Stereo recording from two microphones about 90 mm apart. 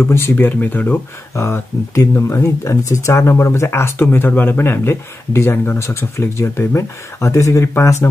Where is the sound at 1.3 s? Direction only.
30° left (ahead or behind).